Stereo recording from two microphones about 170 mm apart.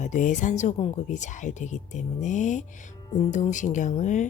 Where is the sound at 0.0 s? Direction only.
45° left (ahead or behind).